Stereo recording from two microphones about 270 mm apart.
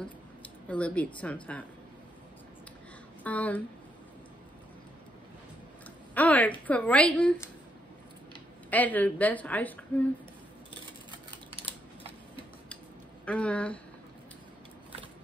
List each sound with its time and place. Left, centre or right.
0.0 s speech: centre
3.3 s a woman's voice: centre
6.1 s a woman's voice: centre
8.6 s a woman's voice: centre
11.1 s typing: centre
13.2 s a woman's voice: centre